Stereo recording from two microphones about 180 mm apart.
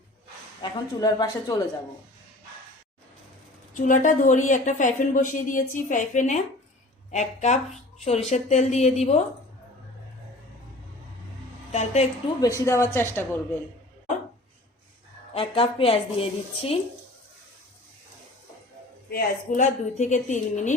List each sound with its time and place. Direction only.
0.6 s speech: 20° left (ahead or behind)
3.8 s a woman's voice: 45° left (ahead or behind)
11.7 s a woman's voice: 35° left (ahead or behind)
12.4 s speech: 15° left (ahead or behind)
15.3 s a woman's voice: 30° left (ahead or behind)
19.1 s a woman's voice: 45° left (ahead or behind)